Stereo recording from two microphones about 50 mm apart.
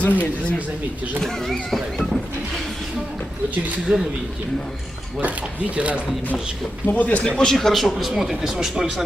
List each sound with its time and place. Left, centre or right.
0.0 s speech: left
1.2 s speech: centre
3.9 s speech: right
5.7 s speech: right
6.8 s speech: left
7.5 s speech: centre